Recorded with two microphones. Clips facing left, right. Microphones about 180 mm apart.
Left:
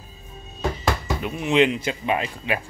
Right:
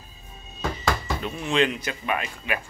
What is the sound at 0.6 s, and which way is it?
Speech, 10° left (ahead or behind).